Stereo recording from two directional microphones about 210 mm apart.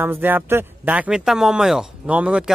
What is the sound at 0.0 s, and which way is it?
A man's voice, 10° right (ahead or behind).